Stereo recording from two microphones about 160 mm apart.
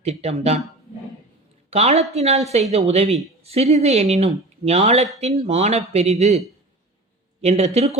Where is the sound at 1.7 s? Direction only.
40° right (ahead or behind).